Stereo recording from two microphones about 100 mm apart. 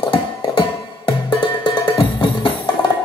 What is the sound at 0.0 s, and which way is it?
Music, 50° left (ahead or behind).